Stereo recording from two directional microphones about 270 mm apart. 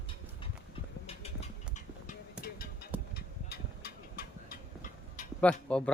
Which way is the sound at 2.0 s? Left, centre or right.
Left.